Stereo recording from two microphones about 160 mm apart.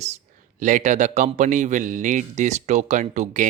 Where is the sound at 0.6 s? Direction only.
50° right (ahead or behind).